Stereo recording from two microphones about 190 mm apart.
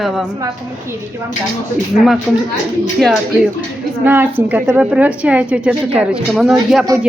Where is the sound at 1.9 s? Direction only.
Centre (ahead or behind).